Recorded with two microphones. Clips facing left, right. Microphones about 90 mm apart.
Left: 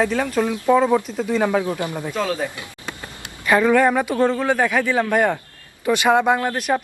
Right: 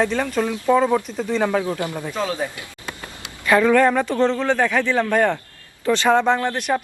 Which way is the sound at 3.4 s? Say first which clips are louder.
Even; 10° left (ahead or behind).